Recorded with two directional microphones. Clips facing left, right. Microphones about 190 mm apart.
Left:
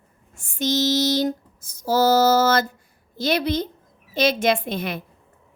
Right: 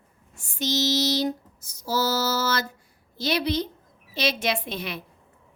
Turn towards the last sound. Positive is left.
turn(degrees=50)  # may be behind; listen again after turning